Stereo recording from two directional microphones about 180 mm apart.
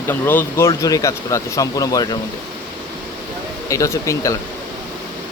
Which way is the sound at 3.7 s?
15° left (ahead or behind).